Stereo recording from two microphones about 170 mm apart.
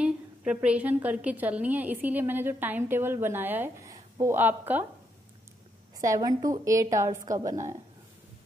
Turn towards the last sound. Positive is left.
turn(degrees=-20)  # may be behind; listen again after turning